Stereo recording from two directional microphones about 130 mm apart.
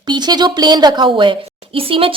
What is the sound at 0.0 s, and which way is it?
A woman's voice, 35° right (ahead or behind).